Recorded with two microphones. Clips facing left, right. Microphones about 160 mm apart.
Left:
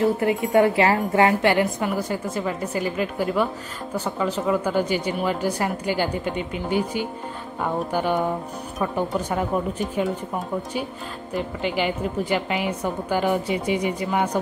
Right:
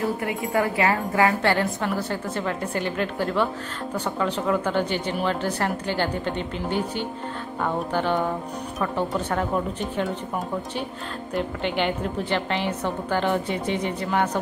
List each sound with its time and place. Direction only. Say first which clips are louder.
0.0 s a woman's voice: left 5 dB; 25° left (ahead or behind); by 10.1 s 5° left (ahead or behind)
11.3 s a woman's voice: even; 5° left (ahead or behind)